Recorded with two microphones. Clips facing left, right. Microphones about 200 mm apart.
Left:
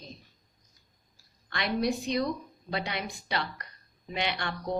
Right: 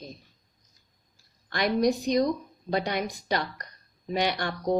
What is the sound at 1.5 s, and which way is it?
Speech, 45° right (ahead or behind).